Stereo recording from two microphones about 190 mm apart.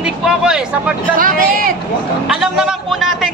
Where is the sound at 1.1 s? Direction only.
50° right (ahead or behind).